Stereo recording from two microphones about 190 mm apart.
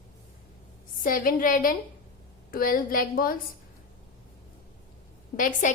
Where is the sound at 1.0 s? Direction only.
50° left (ahead or behind).